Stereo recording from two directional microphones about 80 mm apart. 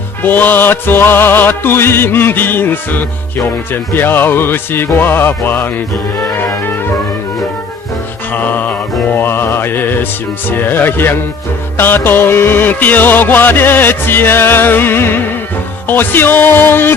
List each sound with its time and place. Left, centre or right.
0.2 s music: left
8.3 s mantra: left
10.5 s music: left